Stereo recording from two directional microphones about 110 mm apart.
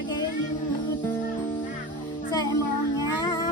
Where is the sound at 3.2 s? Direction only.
35° left (ahead or behind).